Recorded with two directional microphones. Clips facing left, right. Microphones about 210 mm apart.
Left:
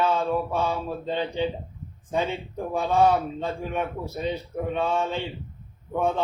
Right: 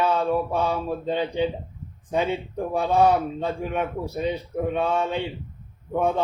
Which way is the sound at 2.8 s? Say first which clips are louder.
Right 1 dB; 15° right (ahead or behind).